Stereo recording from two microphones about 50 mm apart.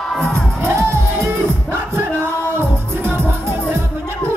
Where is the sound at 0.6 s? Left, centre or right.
Right.